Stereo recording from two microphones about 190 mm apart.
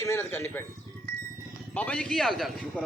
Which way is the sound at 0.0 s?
15° left (ahead or behind).